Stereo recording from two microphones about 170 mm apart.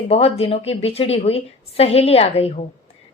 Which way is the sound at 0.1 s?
35° left (ahead or behind).